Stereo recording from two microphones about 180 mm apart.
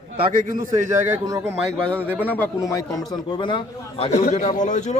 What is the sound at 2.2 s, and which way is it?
A man's voice, 10° left (ahead or behind).